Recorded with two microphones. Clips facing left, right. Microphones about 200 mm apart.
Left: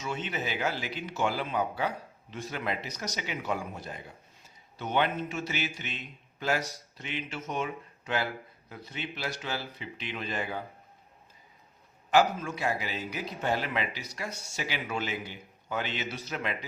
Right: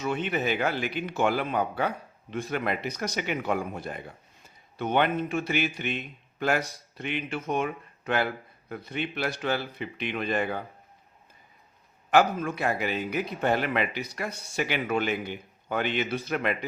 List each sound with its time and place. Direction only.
0.0 s a man's voice: 55° right (ahead or behind)
12.1 s a man's voice: 55° right (ahead or behind)